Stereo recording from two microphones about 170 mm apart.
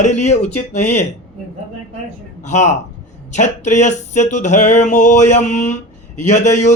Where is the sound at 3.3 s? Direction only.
45° left (ahead or behind).